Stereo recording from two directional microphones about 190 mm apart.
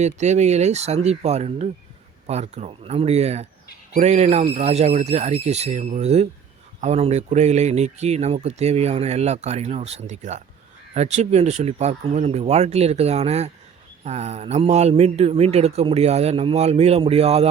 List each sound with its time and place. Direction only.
0.0 s speech: 35° right (ahead or behind)